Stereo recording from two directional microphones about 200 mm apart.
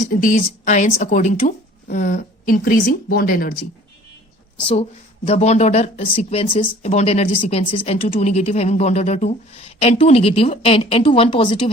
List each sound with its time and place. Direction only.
0.2 s a woman's voice: 40° left (ahead or behind)
4.6 s a woman's voice: 30° left (ahead or behind)